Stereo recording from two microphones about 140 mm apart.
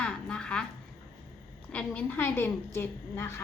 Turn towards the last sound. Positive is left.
turn(degrees=15)  # may be behind; listen again after turning